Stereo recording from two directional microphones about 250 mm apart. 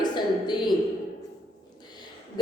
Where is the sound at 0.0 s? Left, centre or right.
Centre.